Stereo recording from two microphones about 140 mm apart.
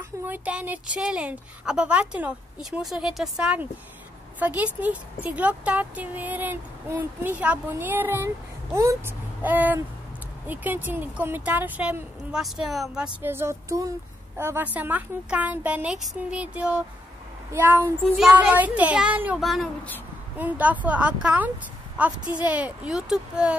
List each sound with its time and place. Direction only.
0.2 s speech: 10° right (ahead or behind)
9.4 s speech: 10° right (ahead or behind)
13.3 s speech: 20° right (ahead or behind)
19.4 s speech: centre (ahead or behind)
20.3 s speech: 10° right (ahead or behind)